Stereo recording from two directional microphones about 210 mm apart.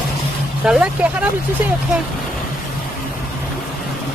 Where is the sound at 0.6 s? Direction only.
5° right (ahead or behind).